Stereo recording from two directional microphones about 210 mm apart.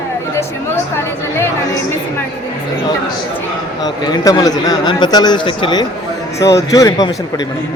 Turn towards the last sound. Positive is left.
turn(degrees=15)  # may be behind; listen again after turning